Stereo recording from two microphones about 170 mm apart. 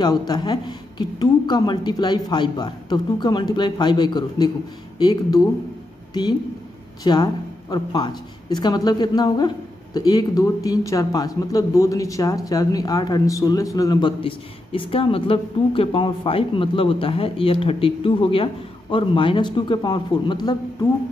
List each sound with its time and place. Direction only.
0.0 s speech: 25° left (ahead or behind)
7.0 s speech: 25° left (ahead or behind)